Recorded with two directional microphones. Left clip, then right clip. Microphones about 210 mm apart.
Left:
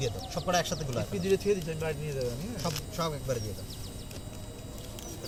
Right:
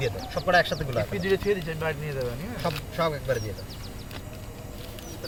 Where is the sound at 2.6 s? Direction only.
35° right (ahead or behind).